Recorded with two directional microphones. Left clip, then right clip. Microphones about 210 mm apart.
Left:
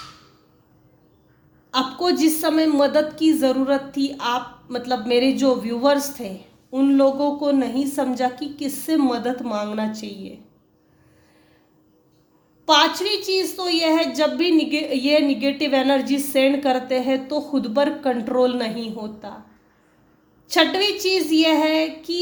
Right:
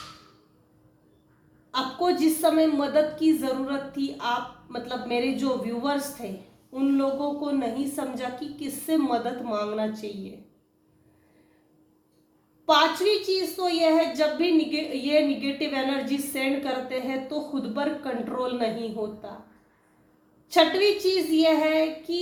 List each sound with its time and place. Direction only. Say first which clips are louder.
1.7 s a woman's voice: left 4 dB; 50° left (ahead or behind)
12.6 s a woman's voice: left 3 dB; 50° left (ahead or behind)
20.5 s a woman's voice: left 2 dB; 50° left (ahead or behind)